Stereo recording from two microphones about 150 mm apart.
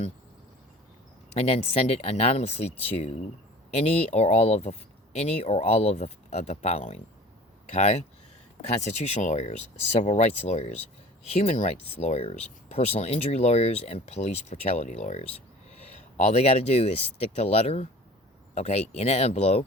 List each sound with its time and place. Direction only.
1.4 s speech: 40° left (ahead or behind)
9.0 s speech: 50° left (ahead or behind)